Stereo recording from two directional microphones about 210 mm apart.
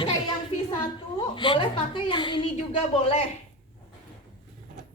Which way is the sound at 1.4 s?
25° left (ahead or behind).